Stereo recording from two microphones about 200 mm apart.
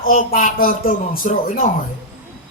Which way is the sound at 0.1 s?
40° left (ahead or behind).